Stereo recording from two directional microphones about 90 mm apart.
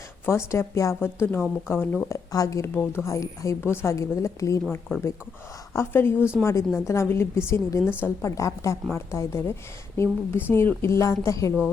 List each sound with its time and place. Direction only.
0.3 s speech: 30° left (ahead or behind)
2.0 s a woman's voice: 35° left (ahead or behind)
5.7 s a woman's voice: 25° left (ahead or behind)